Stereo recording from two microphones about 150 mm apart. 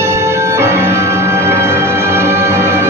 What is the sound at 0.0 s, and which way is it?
Music, 15° right (ahead or behind).